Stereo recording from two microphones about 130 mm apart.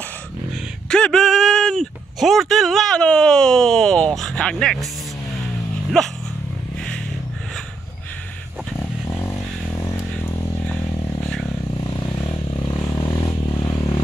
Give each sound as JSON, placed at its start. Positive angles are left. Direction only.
{"t": 0.8, "sound": "speech", "side_deg": 5}
{"t": 5.9, "sound": "speech", "side_deg": 5}
{"t": 9.8, "sound": "music", "side_deg": 25}
{"t": 12.6, "sound": "vehicle", "side_deg": 25}